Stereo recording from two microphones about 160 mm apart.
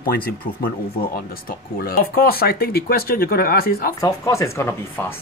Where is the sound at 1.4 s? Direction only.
65° left (ahead or behind).